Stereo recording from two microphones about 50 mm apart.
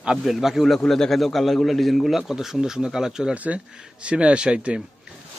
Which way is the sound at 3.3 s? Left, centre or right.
Right.